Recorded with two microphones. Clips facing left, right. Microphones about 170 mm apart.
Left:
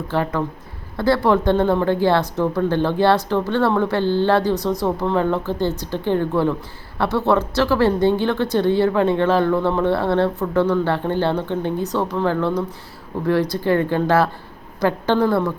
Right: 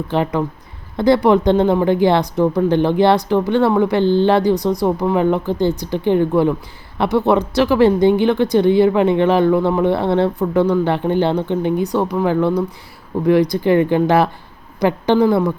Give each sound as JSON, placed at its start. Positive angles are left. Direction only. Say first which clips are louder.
{"t": 0.1, "sound": "speech", "louder": "right 3 dB", "side_deg": -20}